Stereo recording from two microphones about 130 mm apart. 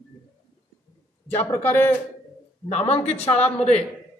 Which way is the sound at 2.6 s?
50° left (ahead or behind).